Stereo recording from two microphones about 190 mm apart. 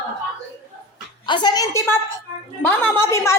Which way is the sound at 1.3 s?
25° left (ahead or behind).